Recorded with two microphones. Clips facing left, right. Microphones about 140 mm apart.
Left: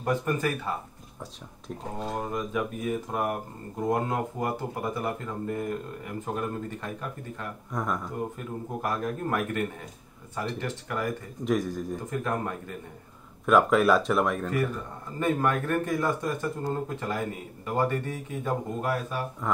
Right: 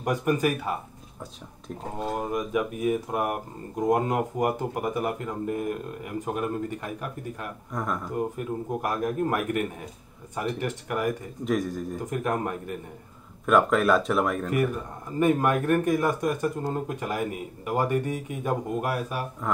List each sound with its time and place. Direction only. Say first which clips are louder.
0.0 s speech: right 3 dB; 15° right (ahead or behind)
1.8 s speech: right 3 dB; centre (ahead or behind)
2.3 s speech: right 3 dB; 15° right (ahead or behind)
7.7 s speech: even; centre (ahead or behind)
8.4 s speech: right 4 dB; 15° right (ahead or behind)
11.4 s speech: even; centre (ahead or behind)
12.1 s speech: right 4 dB; 15° right (ahead or behind)
13.5 s speech: even; centre (ahead or behind)
14.5 s speech: right 3 dB; 15° right (ahead or behind)
19.4 s speech: even; centre (ahead or behind)